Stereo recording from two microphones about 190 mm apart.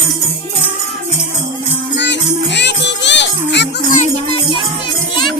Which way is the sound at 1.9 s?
65° left (ahead or behind).